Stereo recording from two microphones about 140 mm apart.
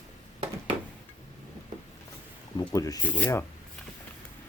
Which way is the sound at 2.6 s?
25° left (ahead or behind).